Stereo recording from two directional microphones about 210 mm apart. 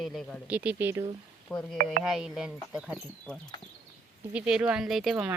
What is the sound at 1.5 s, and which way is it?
Speech, 5° left (ahead or behind).